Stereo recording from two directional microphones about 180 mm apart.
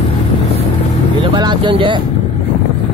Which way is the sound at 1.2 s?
25° right (ahead or behind).